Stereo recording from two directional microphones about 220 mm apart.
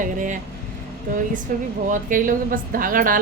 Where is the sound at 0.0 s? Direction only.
35° right (ahead or behind).